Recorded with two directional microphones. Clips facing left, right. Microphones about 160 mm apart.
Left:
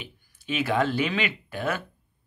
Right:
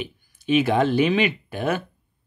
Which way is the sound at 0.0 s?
20° right (ahead or behind).